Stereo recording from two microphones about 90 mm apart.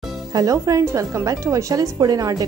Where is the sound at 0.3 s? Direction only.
40° right (ahead or behind).